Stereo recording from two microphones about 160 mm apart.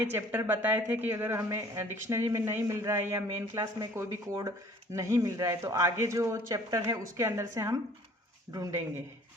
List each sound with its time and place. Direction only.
0.0 s speech: 15° right (ahead or behind)